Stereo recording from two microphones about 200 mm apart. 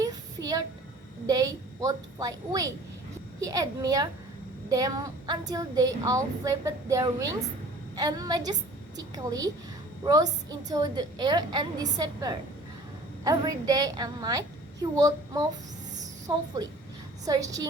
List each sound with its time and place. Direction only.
0.0 s a sound: 20° right (ahead or behind)
1.3 s a woman's voice: 20° right (ahead or behind)
17.2 s a woman's voice: 15° right (ahead or behind)